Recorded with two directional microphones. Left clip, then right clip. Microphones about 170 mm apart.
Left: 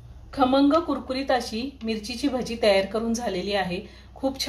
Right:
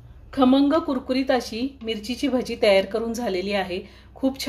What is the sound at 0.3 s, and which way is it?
Speech, 55° right (ahead or behind).